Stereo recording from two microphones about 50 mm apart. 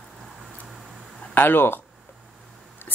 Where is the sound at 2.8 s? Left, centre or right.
Left.